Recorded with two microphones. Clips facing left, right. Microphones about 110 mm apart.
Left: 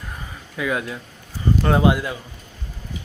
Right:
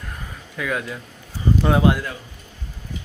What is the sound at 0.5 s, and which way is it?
Speech, 5° left (ahead or behind).